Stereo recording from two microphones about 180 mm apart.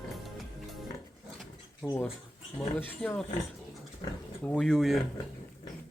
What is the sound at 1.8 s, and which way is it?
Speech, 10° left (ahead or behind).